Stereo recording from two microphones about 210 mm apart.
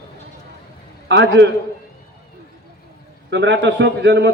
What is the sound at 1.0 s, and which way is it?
Speech, 55° right (ahead or behind).